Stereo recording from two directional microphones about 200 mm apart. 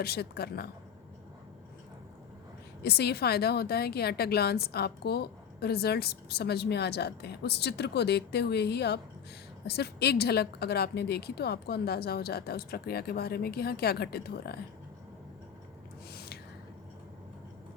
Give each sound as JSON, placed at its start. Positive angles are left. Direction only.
{"t": 0.0, "sound": "a woman's voice", "side_deg": 50}
{"t": 2.8, "sound": "a woman's voice", "side_deg": 55}
{"t": 16.1, "sound": "snort", "side_deg": 50}